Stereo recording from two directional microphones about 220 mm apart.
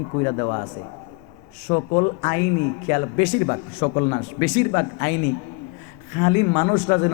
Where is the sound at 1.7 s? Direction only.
25° left (ahead or behind).